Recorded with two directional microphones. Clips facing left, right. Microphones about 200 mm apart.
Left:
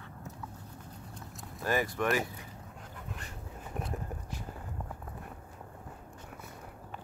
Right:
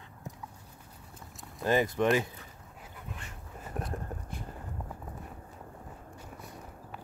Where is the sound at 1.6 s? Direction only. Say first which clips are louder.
Right 4 dB; 20° right (ahead or behind).